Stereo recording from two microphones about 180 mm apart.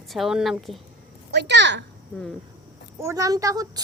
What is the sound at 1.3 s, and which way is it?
Speech, 75° right (ahead or behind).